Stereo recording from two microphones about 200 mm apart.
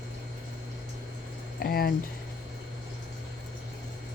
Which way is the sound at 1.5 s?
50° left (ahead or behind).